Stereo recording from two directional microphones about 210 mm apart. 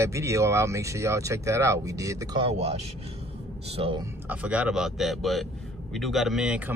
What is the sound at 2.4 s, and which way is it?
Speech, 30° right (ahead or behind).